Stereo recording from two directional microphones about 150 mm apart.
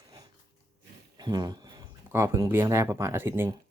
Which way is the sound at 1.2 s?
30° right (ahead or behind).